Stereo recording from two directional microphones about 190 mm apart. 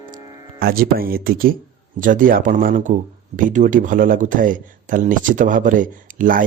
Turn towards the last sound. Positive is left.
turn(degrees=-45)  # may be behind; listen again after turning